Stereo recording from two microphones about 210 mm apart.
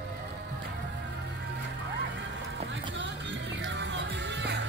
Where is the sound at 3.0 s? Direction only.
60° right (ahead or behind).